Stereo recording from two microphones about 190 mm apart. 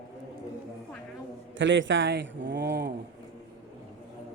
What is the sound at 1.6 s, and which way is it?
A man's voice, 80° right.